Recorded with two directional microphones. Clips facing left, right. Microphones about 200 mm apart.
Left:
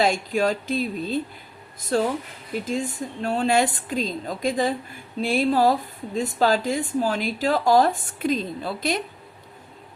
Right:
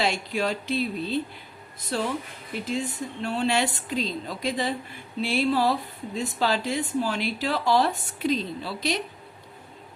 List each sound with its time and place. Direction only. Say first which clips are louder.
0.0 s a woman's voice: left 5 dB; 45° left (ahead or behind)